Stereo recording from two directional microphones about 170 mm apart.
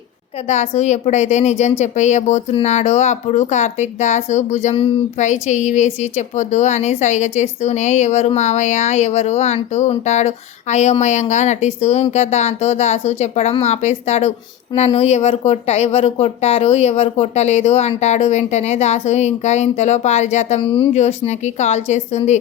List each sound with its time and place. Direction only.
0.4 s a woman's voice: 40° left (ahead or behind)